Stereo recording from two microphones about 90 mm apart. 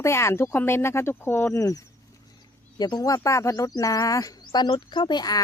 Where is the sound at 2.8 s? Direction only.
50° left (ahead or behind).